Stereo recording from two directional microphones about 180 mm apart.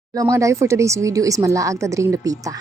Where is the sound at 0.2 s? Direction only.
15° right (ahead or behind).